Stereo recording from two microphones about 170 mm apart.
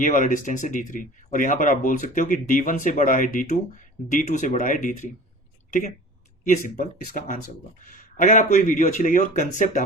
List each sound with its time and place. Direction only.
0.0 s speech: 50° left (ahead or behind)
6.5 s speech: 50° left (ahead or behind)